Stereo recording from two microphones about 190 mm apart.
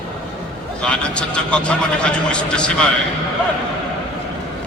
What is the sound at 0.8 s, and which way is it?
A man's voice, 5° left (ahead or behind).